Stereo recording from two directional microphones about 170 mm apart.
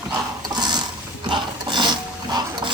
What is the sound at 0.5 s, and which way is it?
Mechanisms, 25° right (ahead or behind).